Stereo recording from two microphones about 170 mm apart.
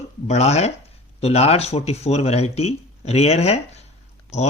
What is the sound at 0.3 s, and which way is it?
Speech, 40° left (ahead or behind).